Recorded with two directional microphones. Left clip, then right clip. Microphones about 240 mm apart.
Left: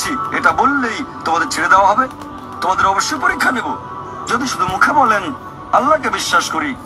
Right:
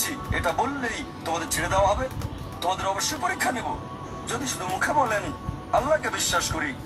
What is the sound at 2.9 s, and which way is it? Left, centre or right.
A man's voice, left.